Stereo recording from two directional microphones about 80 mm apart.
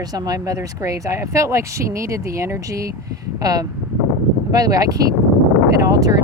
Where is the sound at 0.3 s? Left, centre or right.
Right.